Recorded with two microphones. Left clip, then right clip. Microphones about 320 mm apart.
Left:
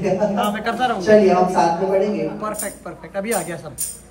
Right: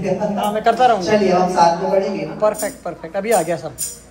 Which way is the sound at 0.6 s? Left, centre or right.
Centre.